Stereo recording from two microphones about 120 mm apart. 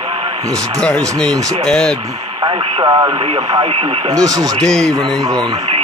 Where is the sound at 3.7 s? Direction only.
55° right (ahead or behind).